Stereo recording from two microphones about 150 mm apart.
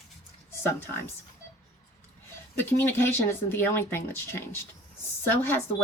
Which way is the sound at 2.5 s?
15° left (ahead or behind).